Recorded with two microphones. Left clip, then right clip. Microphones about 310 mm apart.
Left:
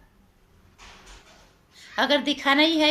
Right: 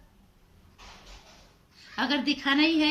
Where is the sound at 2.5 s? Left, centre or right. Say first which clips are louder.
Left 5 dB; left.